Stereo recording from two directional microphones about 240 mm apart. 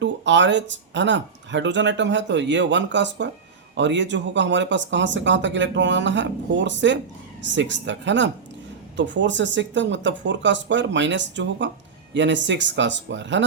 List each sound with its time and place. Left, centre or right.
0.0 s speech: right